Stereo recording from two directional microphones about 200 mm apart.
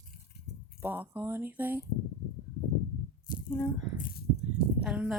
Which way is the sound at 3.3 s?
45° left (ahead or behind).